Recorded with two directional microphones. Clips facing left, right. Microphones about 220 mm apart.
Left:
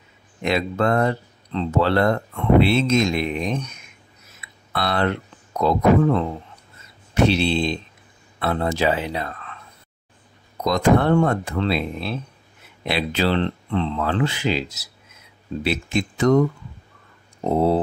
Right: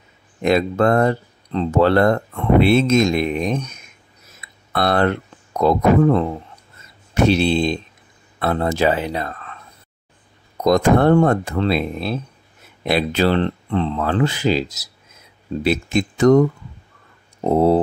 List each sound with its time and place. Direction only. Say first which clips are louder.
0.4 s speech: right 5 dB; 45° right (ahead or behind)
7.2 s speech: right 5 dB; 45° right (ahead or behind)
10.6 s speech: right 4 dB; 45° right (ahead or behind)